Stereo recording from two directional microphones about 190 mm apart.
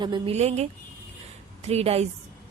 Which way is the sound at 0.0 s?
25° right (ahead or behind).